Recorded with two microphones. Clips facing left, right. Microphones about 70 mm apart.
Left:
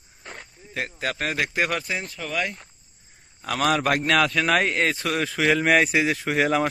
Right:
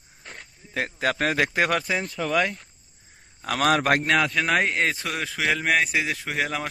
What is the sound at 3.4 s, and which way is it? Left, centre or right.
Speech, right.